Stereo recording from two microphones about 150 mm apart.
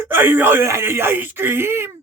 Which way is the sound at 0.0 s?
15° right (ahead or behind).